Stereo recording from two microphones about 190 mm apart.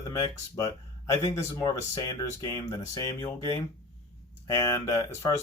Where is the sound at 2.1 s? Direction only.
20° left (ahead or behind).